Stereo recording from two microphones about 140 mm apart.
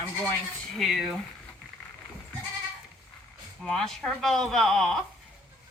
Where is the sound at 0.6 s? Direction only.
Centre (ahead or behind).